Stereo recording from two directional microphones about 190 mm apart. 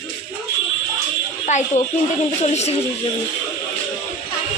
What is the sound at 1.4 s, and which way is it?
Speech, 40° left (ahead or behind).